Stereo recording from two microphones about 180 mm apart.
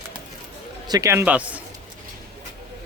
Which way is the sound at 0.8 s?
20° right (ahead or behind).